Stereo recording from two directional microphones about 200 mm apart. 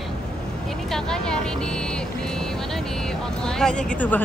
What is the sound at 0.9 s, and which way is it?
Speech, 5° left (ahead or behind).